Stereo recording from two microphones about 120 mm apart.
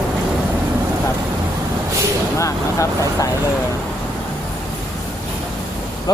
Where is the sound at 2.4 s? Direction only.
25° left (ahead or behind).